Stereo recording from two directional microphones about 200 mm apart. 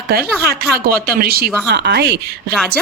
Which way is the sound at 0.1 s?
50° right (ahead or behind).